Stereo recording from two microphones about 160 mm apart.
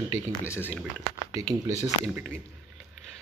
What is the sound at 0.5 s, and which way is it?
Speech, 10° left (ahead or behind).